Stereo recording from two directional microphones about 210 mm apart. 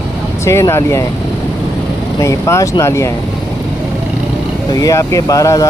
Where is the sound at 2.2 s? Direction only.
15° left (ahead or behind).